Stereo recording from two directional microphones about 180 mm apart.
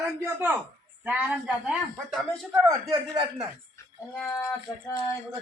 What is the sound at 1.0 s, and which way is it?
Speech, 5° right (ahead or behind).